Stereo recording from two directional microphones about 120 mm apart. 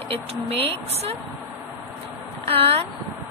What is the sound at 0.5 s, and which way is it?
Speech, 55° right (ahead or behind).